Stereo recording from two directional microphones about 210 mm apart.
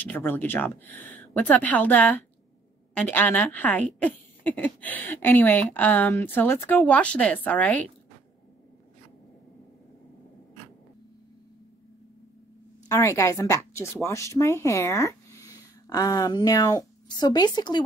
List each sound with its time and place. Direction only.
0.0 s speech: 10° left (ahead or behind)
12.8 s a woman's voice: 15° left (ahead or behind)